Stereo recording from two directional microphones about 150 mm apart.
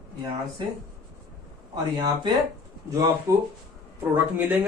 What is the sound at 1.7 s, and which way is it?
Speech, 30° right (ahead or behind).